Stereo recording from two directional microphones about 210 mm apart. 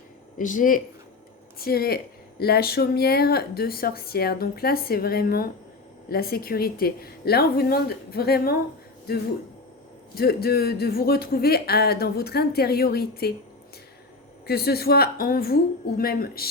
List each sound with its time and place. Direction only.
0.3 s speech: 40° left (ahead or behind)
10.2 s speech: 45° left (ahead or behind)
14.4 s speech: 50° left (ahead or behind)